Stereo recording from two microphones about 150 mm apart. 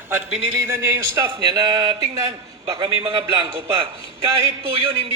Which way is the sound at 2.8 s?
40° right (ahead or behind).